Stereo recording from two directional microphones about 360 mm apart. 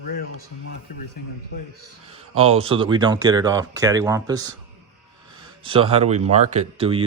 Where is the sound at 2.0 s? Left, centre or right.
Centre.